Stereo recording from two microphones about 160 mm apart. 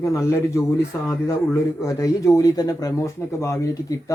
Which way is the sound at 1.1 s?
20° left (ahead or behind).